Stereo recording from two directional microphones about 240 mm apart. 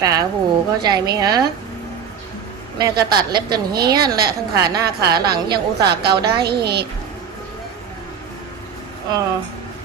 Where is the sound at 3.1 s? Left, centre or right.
Centre.